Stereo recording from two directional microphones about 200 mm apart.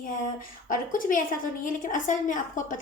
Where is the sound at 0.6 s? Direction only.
40° left (ahead or behind).